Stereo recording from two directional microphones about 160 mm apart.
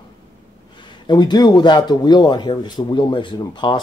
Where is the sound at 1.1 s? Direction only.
25° left (ahead or behind).